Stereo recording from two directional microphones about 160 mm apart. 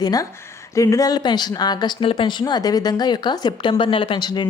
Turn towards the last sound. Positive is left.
turn(degrees=30)  # may be behind; listen again after turning